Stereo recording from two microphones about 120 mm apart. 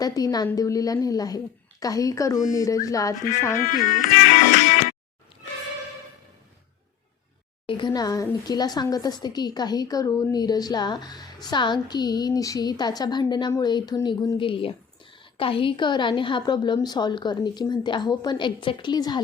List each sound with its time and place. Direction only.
0.0 s a woman's voice: 30° left (ahead or behind)
3.8 s music: 90° left
7.7 s a woman's voice: 40° left (ahead or behind)